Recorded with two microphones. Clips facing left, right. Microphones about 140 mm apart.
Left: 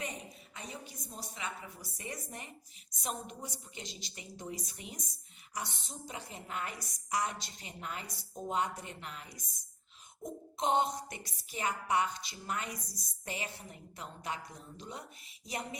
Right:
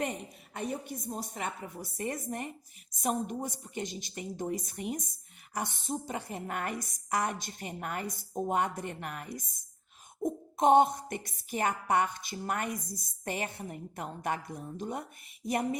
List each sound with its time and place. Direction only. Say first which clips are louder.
0.5 s a woman's voice: right 11 dB; 55° right (ahead or behind)